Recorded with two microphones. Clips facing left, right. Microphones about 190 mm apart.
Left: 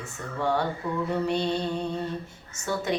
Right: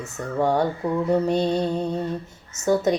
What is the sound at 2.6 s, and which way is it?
Speech, 45° right (ahead or behind).